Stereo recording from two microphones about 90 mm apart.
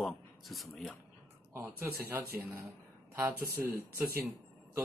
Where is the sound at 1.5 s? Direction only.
25° right (ahead or behind).